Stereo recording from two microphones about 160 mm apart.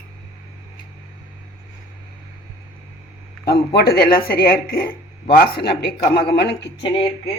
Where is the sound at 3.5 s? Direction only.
80° left.